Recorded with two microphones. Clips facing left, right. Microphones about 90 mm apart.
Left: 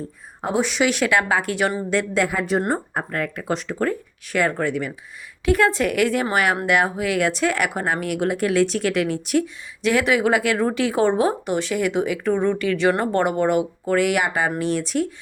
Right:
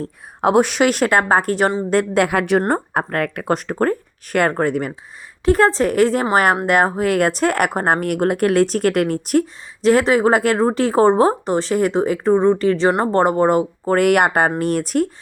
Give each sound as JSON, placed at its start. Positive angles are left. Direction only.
{"t": 0.0, "sound": "speech", "side_deg": -60}
{"t": 1.9, "sound": "speech", "side_deg": -50}